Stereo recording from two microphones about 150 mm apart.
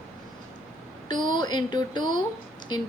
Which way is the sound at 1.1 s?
30° left (ahead or behind).